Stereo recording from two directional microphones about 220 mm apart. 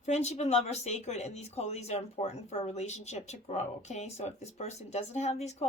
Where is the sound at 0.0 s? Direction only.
30° left (ahead or behind).